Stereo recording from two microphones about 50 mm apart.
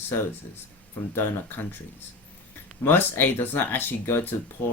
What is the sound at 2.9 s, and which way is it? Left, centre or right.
Speech, left.